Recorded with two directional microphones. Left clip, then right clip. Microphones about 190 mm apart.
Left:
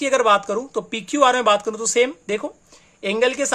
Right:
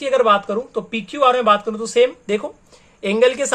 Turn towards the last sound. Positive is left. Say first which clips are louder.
# right 4 dB
turn(degrees=20)  # may be behind; listen again after turning